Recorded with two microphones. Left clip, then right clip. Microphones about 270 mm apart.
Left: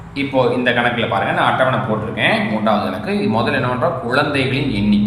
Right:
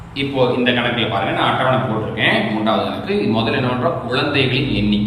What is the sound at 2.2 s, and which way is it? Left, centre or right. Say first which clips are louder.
A man's voice: even; centre.